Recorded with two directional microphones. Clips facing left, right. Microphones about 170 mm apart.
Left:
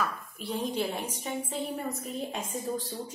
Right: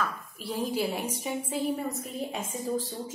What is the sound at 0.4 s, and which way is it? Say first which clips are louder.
A woman's voice: right 1 dB; centre (ahead or behind).